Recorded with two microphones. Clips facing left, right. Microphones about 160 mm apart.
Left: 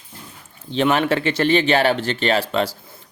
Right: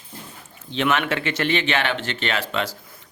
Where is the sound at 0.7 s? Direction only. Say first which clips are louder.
Left 4 dB; 35° left (ahead or behind).